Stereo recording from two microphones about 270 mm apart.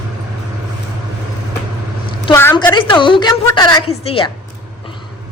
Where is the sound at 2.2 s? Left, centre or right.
Centre.